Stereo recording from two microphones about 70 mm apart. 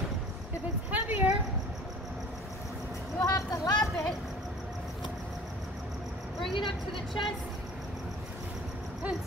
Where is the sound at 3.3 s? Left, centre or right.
Left.